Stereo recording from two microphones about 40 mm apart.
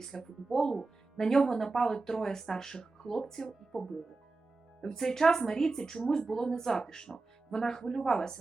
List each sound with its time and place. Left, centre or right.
0.0 s speech: centre